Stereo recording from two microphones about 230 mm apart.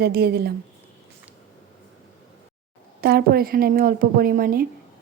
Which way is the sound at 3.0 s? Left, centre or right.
Right.